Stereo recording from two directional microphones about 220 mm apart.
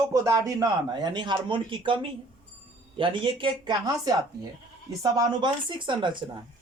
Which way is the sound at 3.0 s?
20° right (ahead or behind).